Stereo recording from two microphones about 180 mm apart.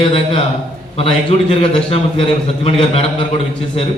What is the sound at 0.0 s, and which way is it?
A man's voice, 35° left (ahead or behind).